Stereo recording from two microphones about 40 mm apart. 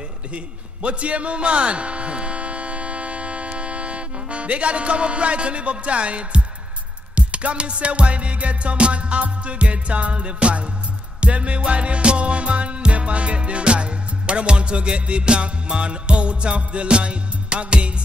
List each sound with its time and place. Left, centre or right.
0.8 s speech: right
7.2 s music: right